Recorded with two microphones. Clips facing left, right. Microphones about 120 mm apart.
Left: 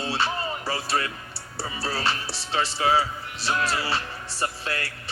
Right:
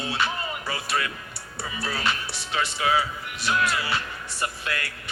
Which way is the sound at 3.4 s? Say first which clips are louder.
Right 1 dB; 30° left (ahead or behind).